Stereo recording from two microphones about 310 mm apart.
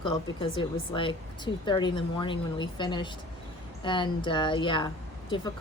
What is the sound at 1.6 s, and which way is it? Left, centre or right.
Speech, centre.